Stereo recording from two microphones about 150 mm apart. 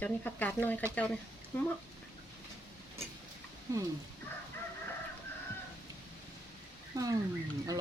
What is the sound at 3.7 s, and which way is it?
Speech, 20° right (ahead or behind).